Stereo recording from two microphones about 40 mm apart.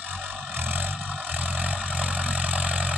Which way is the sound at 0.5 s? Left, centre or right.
Right.